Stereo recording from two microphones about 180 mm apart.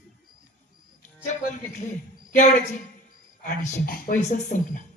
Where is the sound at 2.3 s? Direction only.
40° left (ahead or behind).